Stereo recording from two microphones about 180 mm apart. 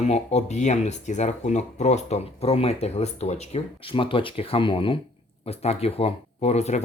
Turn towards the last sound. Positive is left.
turn(degrees=35)  # may be behind; listen again after turning